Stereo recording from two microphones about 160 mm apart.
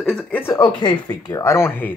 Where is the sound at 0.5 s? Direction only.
25° left (ahead or behind).